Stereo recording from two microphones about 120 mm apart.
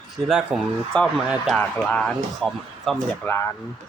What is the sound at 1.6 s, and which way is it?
Speech, 10° left (ahead or behind).